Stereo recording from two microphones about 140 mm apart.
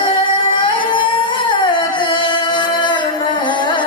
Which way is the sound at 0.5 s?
35° left (ahead or behind).